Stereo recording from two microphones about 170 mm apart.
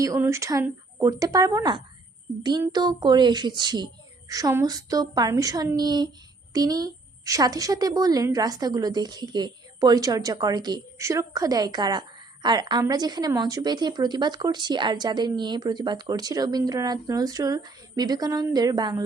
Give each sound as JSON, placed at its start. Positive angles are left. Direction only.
{"t": 0.0, "sound": "a woman's voice", "side_deg": -15}